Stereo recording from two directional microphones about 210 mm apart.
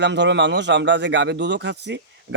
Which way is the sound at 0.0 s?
55° right (ahead or behind).